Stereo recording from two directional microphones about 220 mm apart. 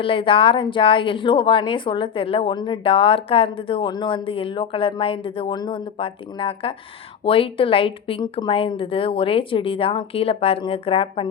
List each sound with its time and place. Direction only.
0.0 s speech: 25° left (ahead or behind)